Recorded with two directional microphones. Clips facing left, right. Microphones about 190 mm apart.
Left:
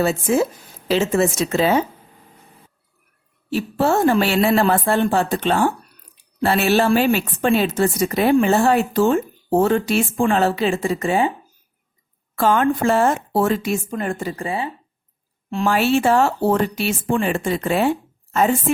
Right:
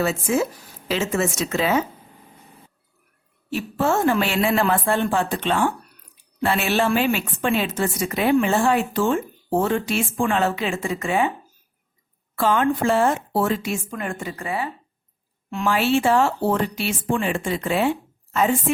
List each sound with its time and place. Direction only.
0.0 s a woman's voice: 35° left (ahead or behind)
3.5 s a woman's voice: 35° left (ahead or behind)
12.4 s a woman's voice: 45° left (ahead or behind)
15.7 s speech: 45° left (ahead or behind)